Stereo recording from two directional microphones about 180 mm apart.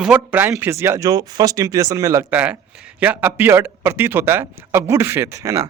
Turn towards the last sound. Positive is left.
turn(degrees=-15)  # may be behind; listen again after turning